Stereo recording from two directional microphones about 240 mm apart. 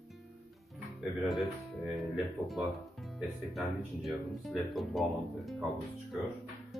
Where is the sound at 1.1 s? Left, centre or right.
Centre.